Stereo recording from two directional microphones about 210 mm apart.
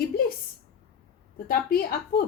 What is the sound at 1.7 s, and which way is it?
Speech, 45° left (ahead or behind).